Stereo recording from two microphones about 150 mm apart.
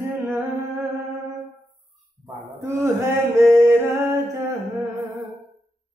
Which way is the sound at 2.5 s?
15° right (ahead or behind).